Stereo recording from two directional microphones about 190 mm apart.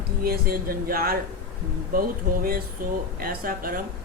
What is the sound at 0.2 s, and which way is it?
Speech, 50° right (ahead or behind).